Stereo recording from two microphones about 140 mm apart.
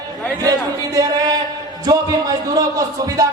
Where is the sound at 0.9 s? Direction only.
25° right (ahead or behind).